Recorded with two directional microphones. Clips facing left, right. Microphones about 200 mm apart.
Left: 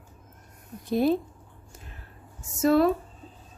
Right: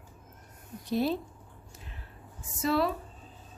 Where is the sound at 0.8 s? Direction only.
50° left (ahead or behind).